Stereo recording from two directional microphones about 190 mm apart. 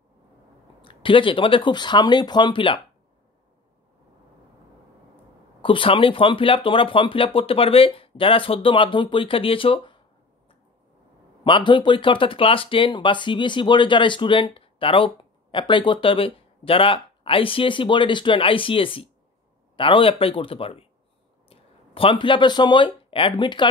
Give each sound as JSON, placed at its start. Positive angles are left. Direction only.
{"t": 0.8, "sound": "speech", "side_deg": 25}
{"t": 5.6, "sound": "speech", "side_deg": 25}
{"t": 11.4, "sound": "speech", "side_deg": 25}